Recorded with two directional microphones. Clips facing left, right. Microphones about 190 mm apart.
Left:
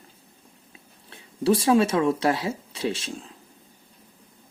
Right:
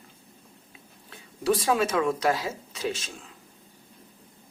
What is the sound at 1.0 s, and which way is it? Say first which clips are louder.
Speech: left 4 dB; 30° left (ahead or behind).